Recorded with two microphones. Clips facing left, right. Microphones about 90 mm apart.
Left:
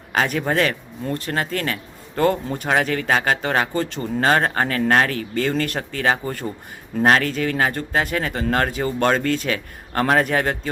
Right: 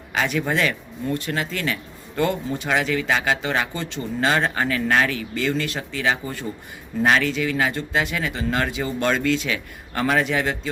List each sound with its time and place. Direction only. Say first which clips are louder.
0.1 s speech: left 2 dB; 45° left (ahead or behind)